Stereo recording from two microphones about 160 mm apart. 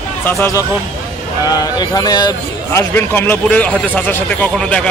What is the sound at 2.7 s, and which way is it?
A man's voice, 15° left (ahead or behind).